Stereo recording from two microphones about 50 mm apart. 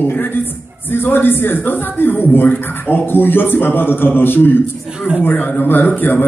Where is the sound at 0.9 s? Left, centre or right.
Left.